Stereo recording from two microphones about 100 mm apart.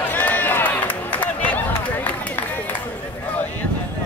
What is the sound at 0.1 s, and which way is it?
Run, 20° left (ahead or behind).